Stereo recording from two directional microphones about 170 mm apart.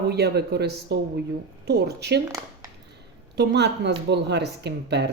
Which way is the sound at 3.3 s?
80° right.